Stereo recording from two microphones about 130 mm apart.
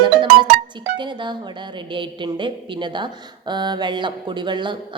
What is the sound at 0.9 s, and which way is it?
A woman's voice, 35° right (ahead or behind).